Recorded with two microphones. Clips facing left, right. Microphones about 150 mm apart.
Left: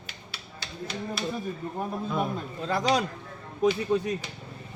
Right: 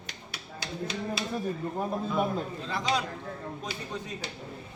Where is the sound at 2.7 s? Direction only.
45° left (ahead or behind).